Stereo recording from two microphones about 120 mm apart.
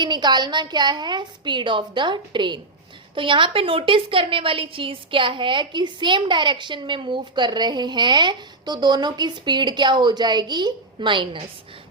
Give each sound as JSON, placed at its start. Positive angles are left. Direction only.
{"t": 0.0, "sound": "a woman's voice", "side_deg": -40}